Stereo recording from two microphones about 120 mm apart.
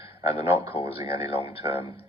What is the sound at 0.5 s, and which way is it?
Speech, 55° left (ahead or behind).